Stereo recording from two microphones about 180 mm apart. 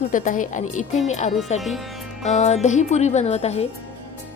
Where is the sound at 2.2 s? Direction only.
40° left (ahead or behind).